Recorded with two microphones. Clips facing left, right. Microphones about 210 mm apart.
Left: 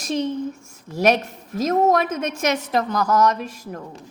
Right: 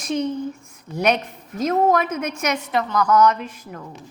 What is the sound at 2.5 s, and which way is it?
Speech, 45° left (ahead or behind).